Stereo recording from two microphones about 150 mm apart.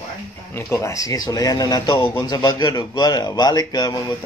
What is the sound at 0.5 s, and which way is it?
A man's voice, 20° left (ahead or behind).